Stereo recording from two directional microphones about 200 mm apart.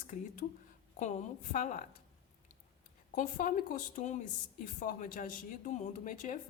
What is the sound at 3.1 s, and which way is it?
A woman's voice, 40° left (ahead or behind).